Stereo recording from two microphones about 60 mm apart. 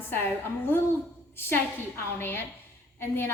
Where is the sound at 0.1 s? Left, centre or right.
Left.